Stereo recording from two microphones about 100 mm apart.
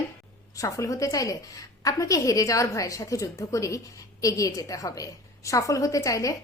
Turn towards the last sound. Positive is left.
turn(degrees=30)  # may be behind; listen again after turning